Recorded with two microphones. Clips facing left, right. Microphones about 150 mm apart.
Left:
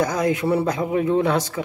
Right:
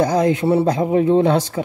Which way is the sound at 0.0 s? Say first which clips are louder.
Right 4 dB; 30° right (ahead or behind).